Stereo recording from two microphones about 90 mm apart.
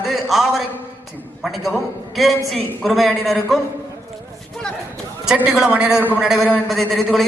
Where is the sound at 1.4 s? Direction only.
Centre (ahead or behind).